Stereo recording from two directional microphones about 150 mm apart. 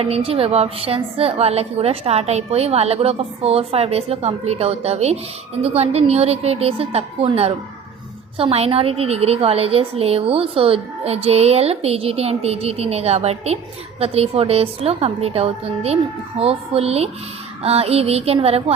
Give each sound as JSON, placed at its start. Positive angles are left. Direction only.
{"t": 0.0, "sound": "a woman's voice", "side_deg": -40}